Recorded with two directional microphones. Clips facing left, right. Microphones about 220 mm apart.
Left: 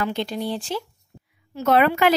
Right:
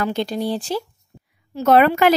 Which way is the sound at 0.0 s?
40° right (ahead or behind).